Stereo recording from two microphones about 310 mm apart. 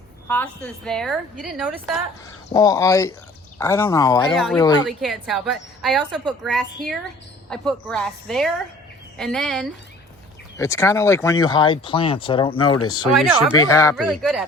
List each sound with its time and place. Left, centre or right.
0.3 s a woman's voice: centre
2.5 s speech: centre
4.9 s a woman's voice: centre
12.8 s speech: left
13.1 s speech: centre
13.6 s speech: centre
13.9 s a woman's voice: centre